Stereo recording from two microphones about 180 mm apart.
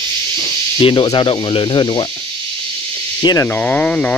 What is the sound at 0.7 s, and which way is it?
Speech, 25° left (ahead or behind).